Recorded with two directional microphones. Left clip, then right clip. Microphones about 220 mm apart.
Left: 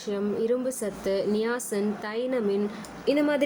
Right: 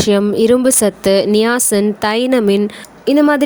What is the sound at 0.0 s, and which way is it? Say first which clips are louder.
A woman's voice: right 15 dB; 45° right (ahead or behind).